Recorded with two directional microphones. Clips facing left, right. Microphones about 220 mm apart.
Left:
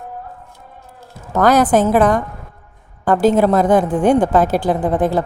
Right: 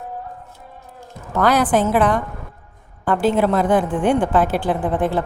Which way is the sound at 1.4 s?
45° left (ahead or behind).